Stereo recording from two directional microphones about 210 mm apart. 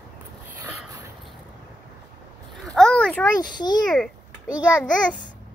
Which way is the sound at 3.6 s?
20° left (ahead or behind).